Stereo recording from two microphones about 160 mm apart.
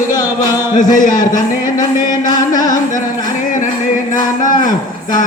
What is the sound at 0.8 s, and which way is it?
Speech, 55° left (ahead or behind).